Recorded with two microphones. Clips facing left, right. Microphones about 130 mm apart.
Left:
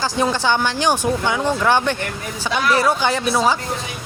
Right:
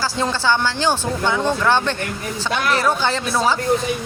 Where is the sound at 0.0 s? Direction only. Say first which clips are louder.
Left 2 dB; 15° left (ahead or behind).